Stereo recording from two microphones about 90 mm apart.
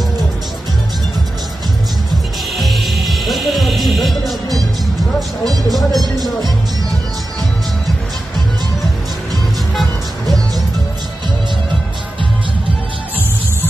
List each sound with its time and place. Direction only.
2.5 s music: centre (ahead or behind)
5.4 s music: 45° right (ahead or behind)
5.9 s music: centre (ahead or behind)
9.8 s music: centre (ahead or behind)